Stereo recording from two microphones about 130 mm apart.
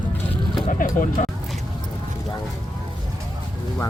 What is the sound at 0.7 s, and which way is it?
Speech, 80° left.